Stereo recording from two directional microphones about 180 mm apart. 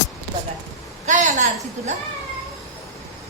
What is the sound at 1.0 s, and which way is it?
Speech, 45° right (ahead or behind).